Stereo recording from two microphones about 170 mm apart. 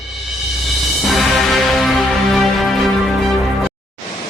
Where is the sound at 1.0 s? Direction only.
Centre (ahead or behind).